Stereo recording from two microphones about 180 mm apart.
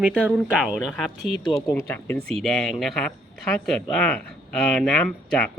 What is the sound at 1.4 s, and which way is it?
Speech, 20° left (ahead or behind).